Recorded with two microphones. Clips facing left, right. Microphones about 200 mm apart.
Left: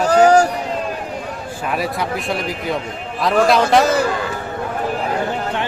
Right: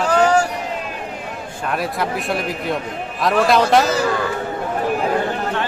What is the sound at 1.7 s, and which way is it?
Speech, centre (ahead or behind).